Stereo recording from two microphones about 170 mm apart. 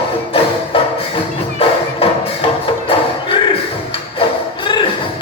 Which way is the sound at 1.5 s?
35° left (ahead or behind).